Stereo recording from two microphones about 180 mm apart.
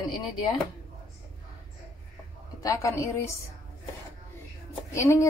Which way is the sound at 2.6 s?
15° left (ahead or behind).